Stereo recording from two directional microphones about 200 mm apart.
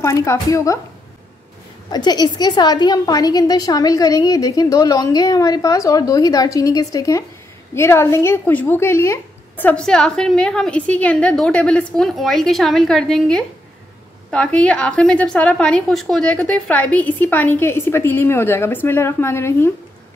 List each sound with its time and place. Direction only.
0.0 s a woman's voice: 15° left (ahead or behind)
1.9 s a woman's voice: 20° left (ahead or behind)